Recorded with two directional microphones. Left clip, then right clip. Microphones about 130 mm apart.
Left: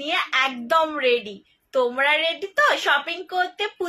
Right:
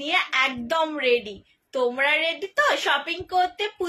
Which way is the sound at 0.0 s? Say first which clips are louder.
Even; 15° right (ahead or behind).